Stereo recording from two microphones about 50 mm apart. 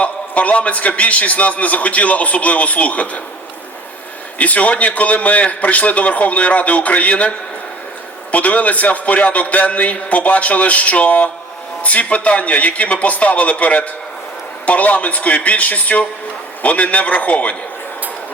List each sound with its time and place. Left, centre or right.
0.0 s a man's voice: left
4.4 s a man's voice: left